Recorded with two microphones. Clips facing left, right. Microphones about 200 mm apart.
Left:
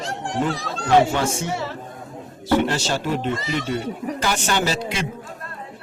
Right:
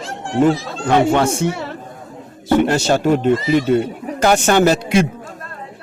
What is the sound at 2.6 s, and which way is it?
Speech, 50° right (ahead or behind).